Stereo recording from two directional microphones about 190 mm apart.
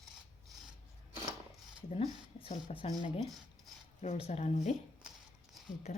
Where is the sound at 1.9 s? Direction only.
35° left (ahead or behind).